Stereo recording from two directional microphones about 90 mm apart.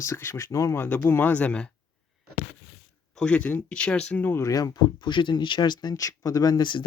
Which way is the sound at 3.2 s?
10° left (ahead or behind).